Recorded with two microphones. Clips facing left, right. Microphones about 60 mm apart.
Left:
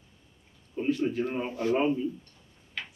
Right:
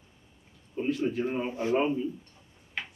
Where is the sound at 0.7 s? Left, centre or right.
Centre.